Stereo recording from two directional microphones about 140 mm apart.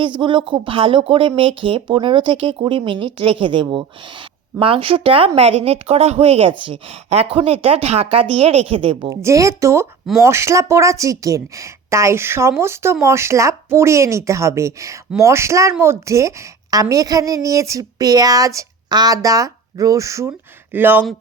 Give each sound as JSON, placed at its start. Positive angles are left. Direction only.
{"t": 0.2, "sound": "speech", "side_deg": -35}
{"t": 9.0, "sound": "a woman's voice", "side_deg": -20}